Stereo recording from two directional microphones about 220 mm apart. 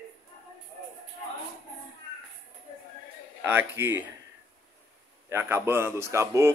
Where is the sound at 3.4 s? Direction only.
10° right (ahead or behind).